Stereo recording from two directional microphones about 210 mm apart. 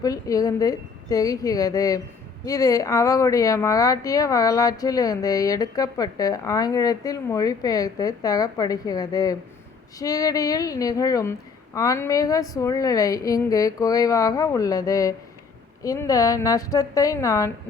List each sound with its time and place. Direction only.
0.0 s speech: 15° left (ahead or behind)